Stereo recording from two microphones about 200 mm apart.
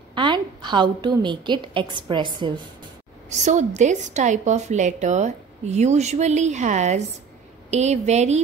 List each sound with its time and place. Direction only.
0.1 s a woman's voice: 25° right (ahead or behind)
3.3 s a woman's voice: 35° right (ahead or behind)